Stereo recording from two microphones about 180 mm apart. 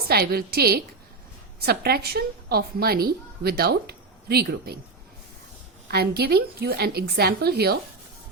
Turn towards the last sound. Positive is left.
turn(degrees=-60)  # may be behind; listen again after turning